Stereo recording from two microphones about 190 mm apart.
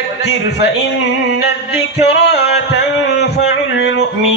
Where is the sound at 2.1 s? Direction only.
65° left (ahead or behind).